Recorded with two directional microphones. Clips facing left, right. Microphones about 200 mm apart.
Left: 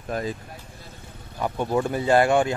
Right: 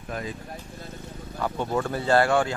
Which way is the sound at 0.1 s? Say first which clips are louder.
Left 5 dB; 35° left (ahead or behind).